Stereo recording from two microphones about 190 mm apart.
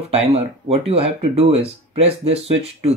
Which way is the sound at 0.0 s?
35° right (ahead or behind).